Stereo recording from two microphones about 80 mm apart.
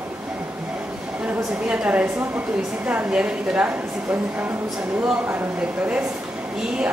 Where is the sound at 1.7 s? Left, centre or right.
Centre.